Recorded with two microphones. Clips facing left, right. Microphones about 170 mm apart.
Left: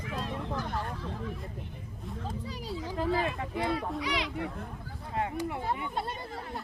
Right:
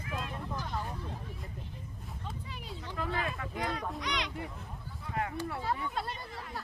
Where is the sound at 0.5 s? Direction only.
75° left (ahead or behind); by 1.3 s 90° left.